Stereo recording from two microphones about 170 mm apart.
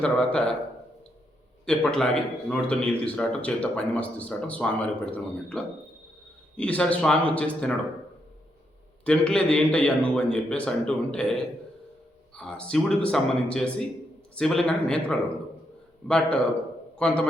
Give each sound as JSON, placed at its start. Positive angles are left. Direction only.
{"t": 0.0, "sound": "speech", "side_deg": 5}
{"t": 1.6, "sound": "speech", "side_deg": 5}
{"t": 9.0, "sound": "speech", "side_deg": 5}
{"t": 12.4, "sound": "speech", "side_deg": 5}
{"t": 16.0, "sound": "speech", "side_deg": 5}